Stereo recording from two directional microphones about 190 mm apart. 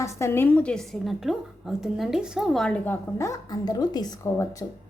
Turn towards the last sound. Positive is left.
turn(degrees=15)  # may be behind; listen again after turning